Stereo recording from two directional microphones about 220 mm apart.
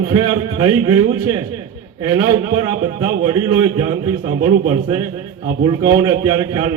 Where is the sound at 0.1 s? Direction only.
20° right (ahead or behind).